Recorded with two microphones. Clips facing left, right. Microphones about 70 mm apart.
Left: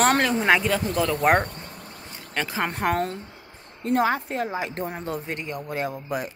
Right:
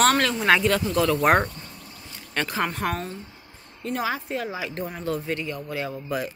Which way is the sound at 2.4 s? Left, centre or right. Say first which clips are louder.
Left 2 dB; left.